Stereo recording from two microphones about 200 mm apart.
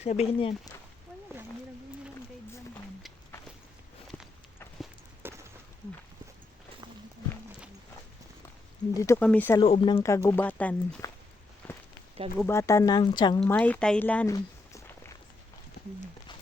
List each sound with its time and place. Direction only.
0.0 s speech: 35° left (ahead or behind)
5.2 s a sound: 10° right (ahead or behind)
9.0 s speech: 10° left (ahead or behind)
9.6 s speech: 25° left (ahead or behind)
10.0 s speech: 15° left (ahead or behind)
11.6 s a sound: 10° left (ahead or behind)
12.4 s speech: 15° left (ahead or behind)
13.4 s speech: 5° left (ahead or behind)
14.3 s a sound: 15° left (ahead or behind)